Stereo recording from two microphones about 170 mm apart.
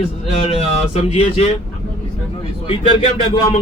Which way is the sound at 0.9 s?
40° left (ahead or behind).